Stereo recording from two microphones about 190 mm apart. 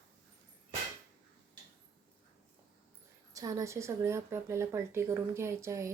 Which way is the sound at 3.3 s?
20° right (ahead or behind).